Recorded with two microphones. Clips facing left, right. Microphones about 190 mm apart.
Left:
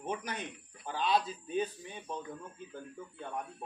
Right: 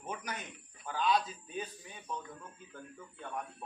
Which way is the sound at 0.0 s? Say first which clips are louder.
Left 4 dB; 30° left (ahead or behind).